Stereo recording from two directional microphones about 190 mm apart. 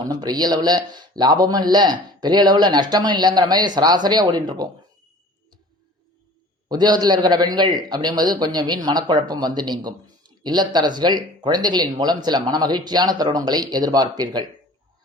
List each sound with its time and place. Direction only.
0.1 s speech: 20° right (ahead or behind)
6.7 s speech: 20° right (ahead or behind)